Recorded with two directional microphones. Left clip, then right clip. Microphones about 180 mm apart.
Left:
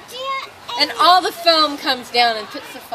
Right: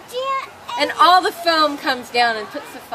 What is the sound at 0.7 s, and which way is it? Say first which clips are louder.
A woman's voice: even; 10° left (ahead or behind).